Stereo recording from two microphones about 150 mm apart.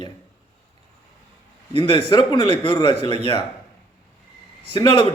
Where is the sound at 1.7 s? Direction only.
35° left (ahead or behind).